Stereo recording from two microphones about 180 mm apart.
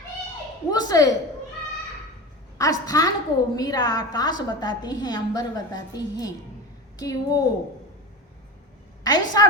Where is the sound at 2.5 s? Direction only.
20° left (ahead or behind).